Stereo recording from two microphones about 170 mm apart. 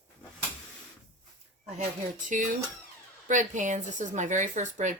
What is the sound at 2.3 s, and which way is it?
Speech, 50° right (ahead or behind).